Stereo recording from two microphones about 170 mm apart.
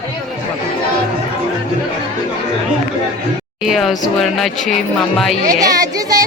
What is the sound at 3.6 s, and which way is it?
A man's voice, centre (ahead or behind).